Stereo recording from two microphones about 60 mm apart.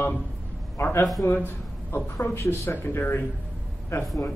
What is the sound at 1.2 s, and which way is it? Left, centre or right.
A man's voice, left.